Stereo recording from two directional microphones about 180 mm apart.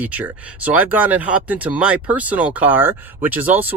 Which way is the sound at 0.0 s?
10° right (ahead or behind).